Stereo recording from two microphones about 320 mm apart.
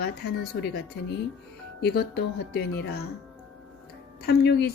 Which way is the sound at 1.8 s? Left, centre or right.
Left.